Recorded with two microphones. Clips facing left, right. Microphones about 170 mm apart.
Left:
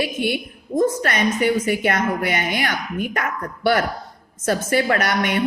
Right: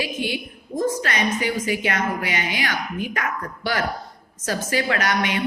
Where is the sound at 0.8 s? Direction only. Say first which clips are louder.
Left 4 dB; 55° left (ahead or behind).